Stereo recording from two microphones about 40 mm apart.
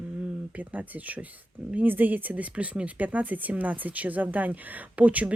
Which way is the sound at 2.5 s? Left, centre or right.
Right.